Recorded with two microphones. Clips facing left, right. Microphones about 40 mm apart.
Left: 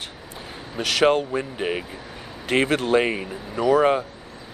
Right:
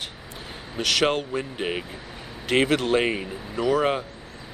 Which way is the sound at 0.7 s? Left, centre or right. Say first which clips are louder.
Left 3 dB; centre.